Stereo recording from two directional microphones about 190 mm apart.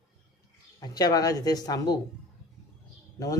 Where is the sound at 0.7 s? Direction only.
20° left (ahead or behind).